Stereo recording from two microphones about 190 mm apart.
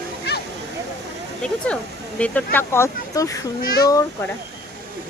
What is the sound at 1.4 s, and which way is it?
A woman's voice, 5° left (ahead or behind).